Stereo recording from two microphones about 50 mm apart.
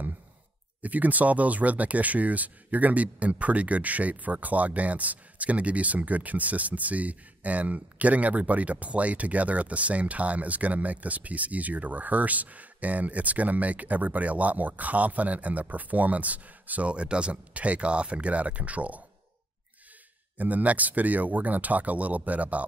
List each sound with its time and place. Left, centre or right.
0.8 s speech: right
20.3 s speech: right